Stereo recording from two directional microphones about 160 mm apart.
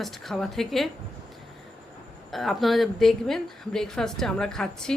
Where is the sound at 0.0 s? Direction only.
Centre (ahead or behind).